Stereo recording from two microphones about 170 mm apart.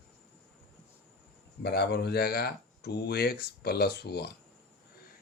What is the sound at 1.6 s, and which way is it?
Speech, 75° left (ahead or behind).